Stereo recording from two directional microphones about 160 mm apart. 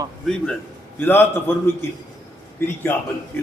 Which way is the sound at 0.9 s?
10° left (ahead or behind).